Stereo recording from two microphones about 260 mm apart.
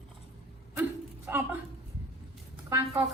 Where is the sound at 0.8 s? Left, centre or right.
Centre.